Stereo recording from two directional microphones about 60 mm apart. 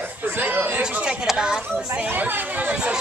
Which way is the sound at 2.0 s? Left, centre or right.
Right.